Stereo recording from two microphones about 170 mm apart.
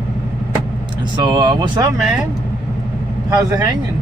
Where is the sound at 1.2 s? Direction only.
25° right (ahead or behind).